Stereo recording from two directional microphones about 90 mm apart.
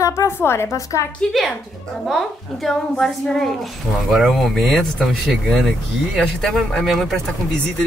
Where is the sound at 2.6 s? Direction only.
5° left (ahead or behind).